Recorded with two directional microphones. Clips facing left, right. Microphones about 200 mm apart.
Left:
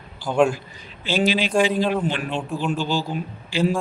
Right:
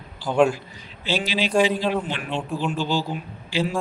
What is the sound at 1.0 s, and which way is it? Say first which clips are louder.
Speech: left 4 dB; 50° left (ahead or behind).